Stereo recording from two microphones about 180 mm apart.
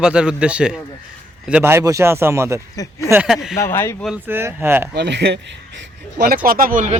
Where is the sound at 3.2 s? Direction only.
Centre (ahead or behind).